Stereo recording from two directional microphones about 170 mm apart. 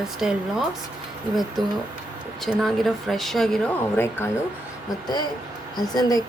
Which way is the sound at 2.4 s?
Centre (ahead or behind).